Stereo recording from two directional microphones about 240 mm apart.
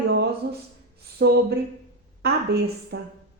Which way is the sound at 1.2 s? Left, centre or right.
Right.